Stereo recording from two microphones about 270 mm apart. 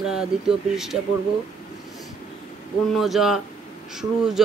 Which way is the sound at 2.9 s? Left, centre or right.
Centre.